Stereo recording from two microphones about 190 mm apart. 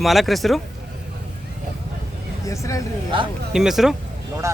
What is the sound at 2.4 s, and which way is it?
Speech, 15° left (ahead or behind).